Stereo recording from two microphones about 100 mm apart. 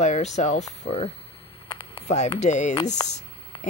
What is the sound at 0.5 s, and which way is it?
Speech, 80° left.